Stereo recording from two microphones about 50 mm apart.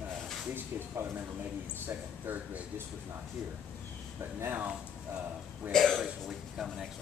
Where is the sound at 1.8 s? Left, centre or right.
Right.